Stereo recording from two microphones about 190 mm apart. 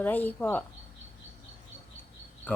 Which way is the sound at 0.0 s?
10° left (ahead or behind).